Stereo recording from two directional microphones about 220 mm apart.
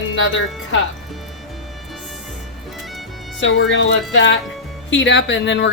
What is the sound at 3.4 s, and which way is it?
A woman's voice, 55° left (ahead or behind).